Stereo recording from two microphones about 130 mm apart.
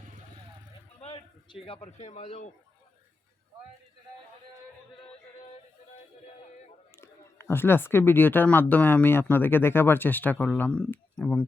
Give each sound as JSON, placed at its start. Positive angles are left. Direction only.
{"t": 0.9, "sound": "a man's voice", "side_deg": 45}
{"t": 6.9, "sound": "speech", "side_deg": 20}